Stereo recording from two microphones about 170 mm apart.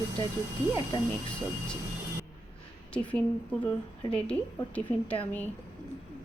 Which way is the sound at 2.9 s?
5° left (ahead or behind).